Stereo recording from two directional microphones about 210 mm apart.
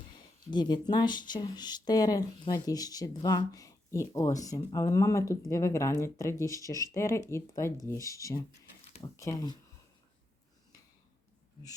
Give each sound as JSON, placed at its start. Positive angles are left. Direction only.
{"t": 0.5, "sound": "speech", "side_deg": 20}